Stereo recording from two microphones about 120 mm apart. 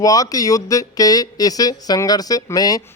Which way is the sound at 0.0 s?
30° left (ahead or behind).